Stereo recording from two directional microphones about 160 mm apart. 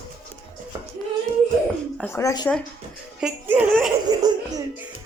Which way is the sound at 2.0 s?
15° left (ahead or behind).